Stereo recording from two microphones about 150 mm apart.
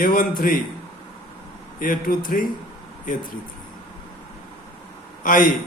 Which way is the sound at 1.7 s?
65° left (ahead or behind).